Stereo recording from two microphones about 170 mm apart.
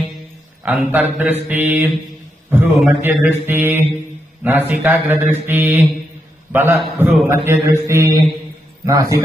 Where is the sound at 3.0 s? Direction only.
10° right (ahead or behind).